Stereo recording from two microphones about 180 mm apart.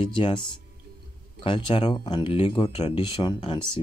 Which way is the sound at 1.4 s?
30° left (ahead or behind).